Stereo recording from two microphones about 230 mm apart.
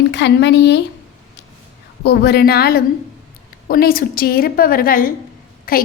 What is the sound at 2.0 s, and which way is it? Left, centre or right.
A woman's voice, left.